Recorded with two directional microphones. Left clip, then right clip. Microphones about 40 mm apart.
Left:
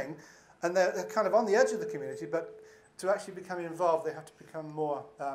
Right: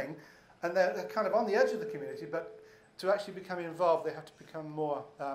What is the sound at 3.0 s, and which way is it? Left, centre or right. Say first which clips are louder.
Speech: even; right.